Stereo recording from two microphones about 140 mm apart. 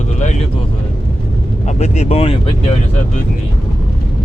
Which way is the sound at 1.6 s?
55° left (ahead or behind).